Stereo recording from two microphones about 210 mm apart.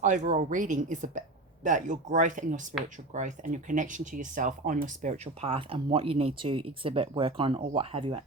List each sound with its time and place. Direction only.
0.0 s speech: 35° right (ahead or behind)